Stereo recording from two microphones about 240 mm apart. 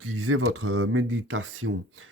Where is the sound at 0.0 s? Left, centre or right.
Right.